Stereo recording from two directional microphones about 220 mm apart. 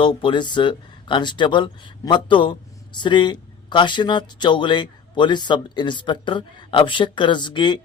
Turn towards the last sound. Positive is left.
turn(degrees=20)  # may be behind; listen again after turning